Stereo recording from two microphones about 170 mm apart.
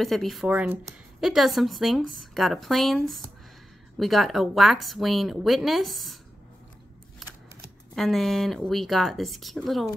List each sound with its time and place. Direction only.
0.0 s a woman's voice: centre (ahead or behind)
7.2 s a sound: centre (ahead or behind)
7.9 s a woman's voice: centre (ahead or behind)